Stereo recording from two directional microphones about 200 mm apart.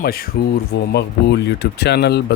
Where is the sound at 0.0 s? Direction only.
50° left (ahead or behind).